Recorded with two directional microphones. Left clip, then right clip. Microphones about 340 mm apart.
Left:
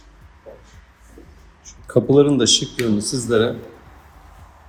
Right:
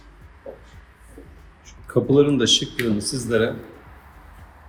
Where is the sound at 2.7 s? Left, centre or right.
Left.